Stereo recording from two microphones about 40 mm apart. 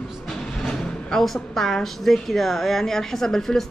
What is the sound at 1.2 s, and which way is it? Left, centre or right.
A woman's voice, centre.